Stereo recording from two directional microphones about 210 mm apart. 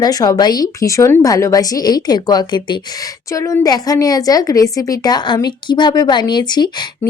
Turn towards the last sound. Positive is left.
turn(degrees=20)  # may be behind; listen again after turning